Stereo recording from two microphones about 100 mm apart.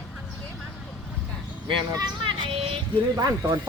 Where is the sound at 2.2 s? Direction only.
55° right (ahead or behind).